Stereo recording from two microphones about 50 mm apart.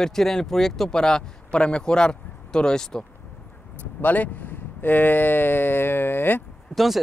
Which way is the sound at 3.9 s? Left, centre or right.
Left.